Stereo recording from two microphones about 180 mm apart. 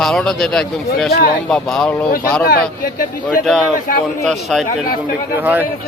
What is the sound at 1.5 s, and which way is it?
Speech, 5° left (ahead or behind).